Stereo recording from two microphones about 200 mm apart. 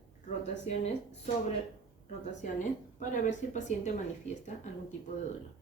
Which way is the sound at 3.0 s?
40° left (ahead or behind).